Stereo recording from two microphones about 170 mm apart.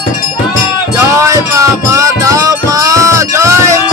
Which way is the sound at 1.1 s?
20° right (ahead or behind).